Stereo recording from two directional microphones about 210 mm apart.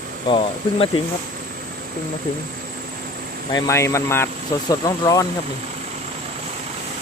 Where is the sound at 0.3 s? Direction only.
25° left (ahead or behind).